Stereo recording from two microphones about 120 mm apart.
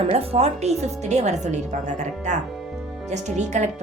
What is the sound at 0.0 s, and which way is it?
A woman's voice, 55° right (ahead or behind).